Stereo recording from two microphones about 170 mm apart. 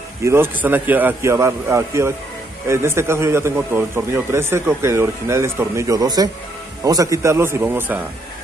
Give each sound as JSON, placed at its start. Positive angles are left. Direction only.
{"t": 0.2, "sound": "a man's voice", "side_deg": -15}